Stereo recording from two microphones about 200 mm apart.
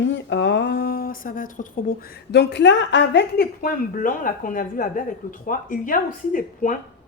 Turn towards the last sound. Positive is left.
turn(degrees=40)  # may be behind; listen again after turning